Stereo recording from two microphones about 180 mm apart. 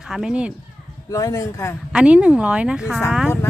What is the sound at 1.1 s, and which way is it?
Speech, 20° left (ahead or behind).